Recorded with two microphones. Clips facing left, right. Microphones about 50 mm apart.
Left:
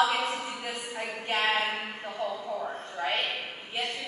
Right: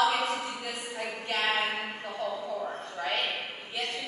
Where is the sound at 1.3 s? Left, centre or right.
Left.